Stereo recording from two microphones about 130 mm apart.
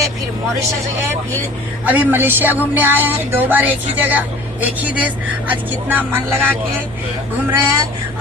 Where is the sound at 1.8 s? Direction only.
10° right (ahead or behind).